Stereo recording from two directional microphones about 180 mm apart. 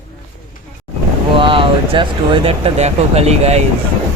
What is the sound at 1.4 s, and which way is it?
Speech, 30° right (ahead or behind).